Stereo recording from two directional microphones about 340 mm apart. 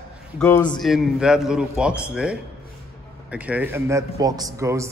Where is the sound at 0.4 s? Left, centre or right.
Centre.